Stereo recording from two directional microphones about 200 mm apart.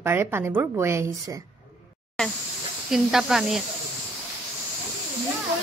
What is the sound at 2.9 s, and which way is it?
Speech, centre (ahead or behind).